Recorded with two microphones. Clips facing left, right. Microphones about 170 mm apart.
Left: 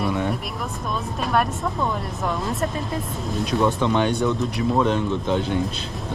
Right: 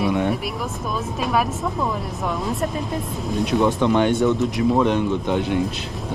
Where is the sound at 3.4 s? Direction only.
15° right (ahead or behind).